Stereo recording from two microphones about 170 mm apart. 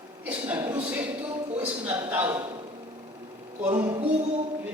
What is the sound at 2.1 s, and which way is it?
Speech, 10° right (ahead or behind).